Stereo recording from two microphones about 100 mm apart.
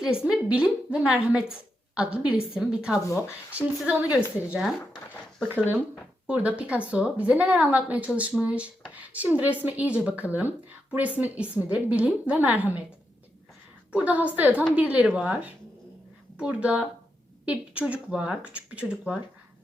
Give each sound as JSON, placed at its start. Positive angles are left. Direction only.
{"t": 0.2, "sound": "speech", "side_deg": -10}
{"t": 3.1, "sound": "speech", "side_deg": 25}
{"t": 3.5, "sound": "speech", "side_deg": -15}
{"t": 4.6, "sound": "speech", "side_deg": 5}
{"t": 5.5, "sound": "speech", "side_deg": -20}
{"t": 13.9, "sound": "speech", "side_deg": -15}